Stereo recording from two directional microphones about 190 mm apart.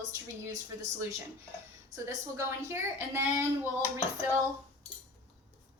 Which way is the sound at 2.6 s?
15° right (ahead or behind).